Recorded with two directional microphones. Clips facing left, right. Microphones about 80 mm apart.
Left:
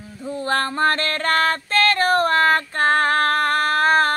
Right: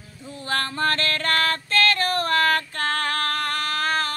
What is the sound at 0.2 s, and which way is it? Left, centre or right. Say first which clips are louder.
Music: left 5 dB; left.